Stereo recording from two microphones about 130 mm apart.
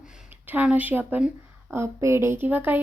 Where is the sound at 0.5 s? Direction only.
10° right (ahead or behind).